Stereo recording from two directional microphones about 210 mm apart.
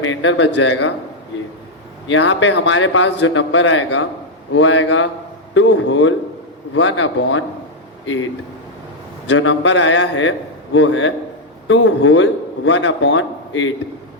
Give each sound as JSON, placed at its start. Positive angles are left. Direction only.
{"t": 0.0, "sound": "a man's voice", "side_deg": 65}
{"t": 2.0, "sound": "a man's voice", "side_deg": 60}